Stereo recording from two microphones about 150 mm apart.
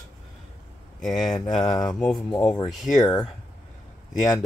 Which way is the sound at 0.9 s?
5° left (ahead or behind).